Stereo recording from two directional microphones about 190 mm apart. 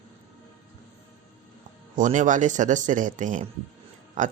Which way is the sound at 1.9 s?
40° right (ahead or behind).